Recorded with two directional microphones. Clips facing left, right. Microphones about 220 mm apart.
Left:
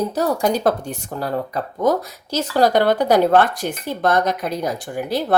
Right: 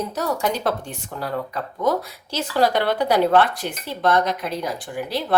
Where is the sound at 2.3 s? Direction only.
45° left (ahead or behind).